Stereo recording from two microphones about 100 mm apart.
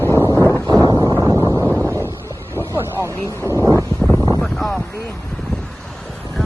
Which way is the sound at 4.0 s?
5° left (ahead or behind).